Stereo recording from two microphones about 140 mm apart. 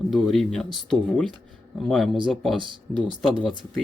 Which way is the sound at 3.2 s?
Centre (ahead or behind).